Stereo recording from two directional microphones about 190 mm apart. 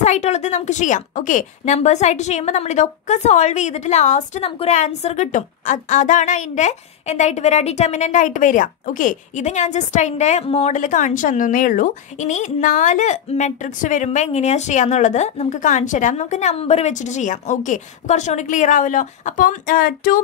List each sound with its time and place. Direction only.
0.0 s a woman's voice: 35° left (ahead or behind)